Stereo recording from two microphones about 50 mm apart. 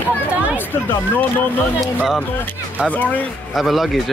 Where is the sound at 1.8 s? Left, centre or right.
Centre.